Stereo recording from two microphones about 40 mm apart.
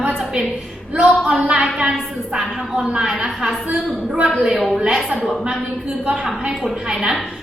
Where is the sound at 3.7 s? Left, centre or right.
Right.